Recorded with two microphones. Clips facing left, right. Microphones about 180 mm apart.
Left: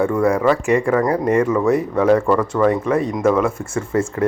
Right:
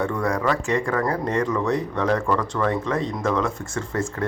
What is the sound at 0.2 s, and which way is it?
Speech, 25° left (ahead or behind).